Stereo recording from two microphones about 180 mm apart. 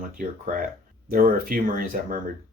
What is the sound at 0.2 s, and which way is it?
Speech, 50° right (ahead or behind).